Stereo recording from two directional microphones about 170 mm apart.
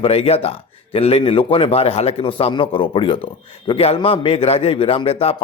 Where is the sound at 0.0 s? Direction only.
35° left (ahead or behind).